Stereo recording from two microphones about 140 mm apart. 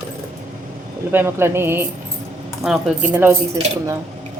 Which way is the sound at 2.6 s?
5° right (ahead or behind).